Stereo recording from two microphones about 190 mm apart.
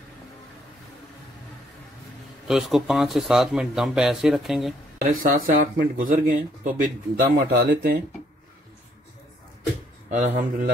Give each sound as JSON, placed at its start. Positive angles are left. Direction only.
{"t": 2.4, "sound": "speech", "side_deg": 0}
{"t": 5.1, "sound": "speech", "side_deg": -45}
{"t": 10.0, "sound": "speech", "side_deg": -40}